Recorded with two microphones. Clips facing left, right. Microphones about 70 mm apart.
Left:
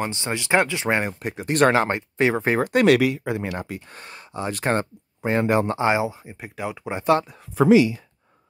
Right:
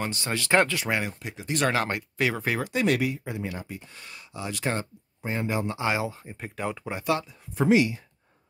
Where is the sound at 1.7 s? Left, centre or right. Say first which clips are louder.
Left 6 dB; left.